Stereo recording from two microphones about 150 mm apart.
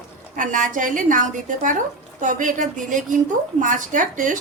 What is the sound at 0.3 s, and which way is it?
A woman's voice, 60° right (ahead or behind).